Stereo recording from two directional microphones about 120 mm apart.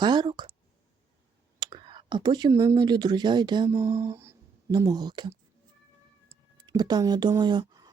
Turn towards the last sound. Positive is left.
turn(degrees=-35)  # may be behind; listen again after turning